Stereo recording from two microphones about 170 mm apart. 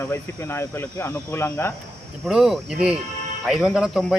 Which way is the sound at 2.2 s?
Centre (ahead or behind).